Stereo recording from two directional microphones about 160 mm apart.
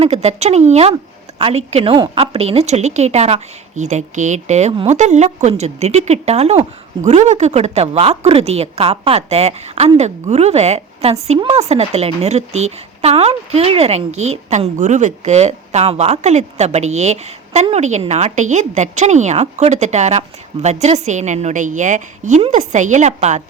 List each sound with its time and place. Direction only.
0.0 s speech: 40° right (ahead or behind)